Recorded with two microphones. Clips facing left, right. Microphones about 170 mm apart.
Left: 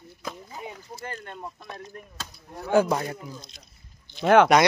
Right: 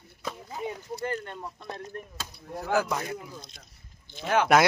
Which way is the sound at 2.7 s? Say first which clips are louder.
Left 6 dB; 30° left (ahead or behind).